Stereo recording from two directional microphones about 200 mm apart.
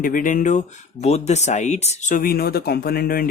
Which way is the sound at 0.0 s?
40° left (ahead or behind).